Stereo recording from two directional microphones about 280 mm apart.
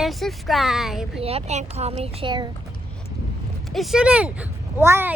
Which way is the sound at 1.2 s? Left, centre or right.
Right.